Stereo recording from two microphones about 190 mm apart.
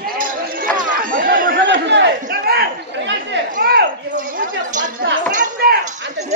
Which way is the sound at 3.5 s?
55° right (ahead or behind).